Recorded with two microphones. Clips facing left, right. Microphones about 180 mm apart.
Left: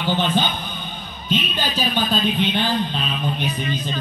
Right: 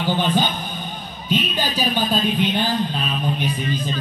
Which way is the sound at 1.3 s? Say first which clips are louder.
Right 1 dB; 10° right (ahead or behind).